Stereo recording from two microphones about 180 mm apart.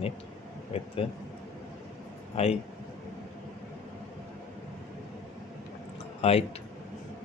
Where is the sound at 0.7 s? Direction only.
30° left (ahead or behind).